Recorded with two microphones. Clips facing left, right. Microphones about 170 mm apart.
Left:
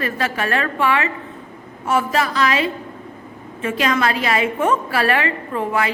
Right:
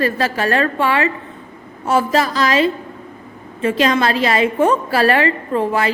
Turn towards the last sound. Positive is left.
turn(degrees=-35)  # may be behind; listen again after turning